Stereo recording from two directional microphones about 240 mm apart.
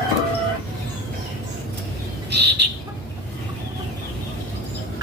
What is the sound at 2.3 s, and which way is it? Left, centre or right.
Bird, right.